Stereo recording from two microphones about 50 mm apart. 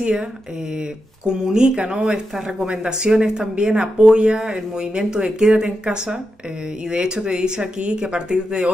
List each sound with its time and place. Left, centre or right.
1.2 s speech: centre